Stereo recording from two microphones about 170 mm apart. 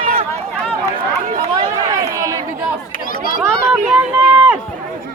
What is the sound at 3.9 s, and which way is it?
Run, 10° right (ahead or behind).